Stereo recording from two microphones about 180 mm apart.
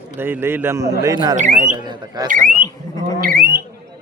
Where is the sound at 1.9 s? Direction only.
20° right (ahead or behind).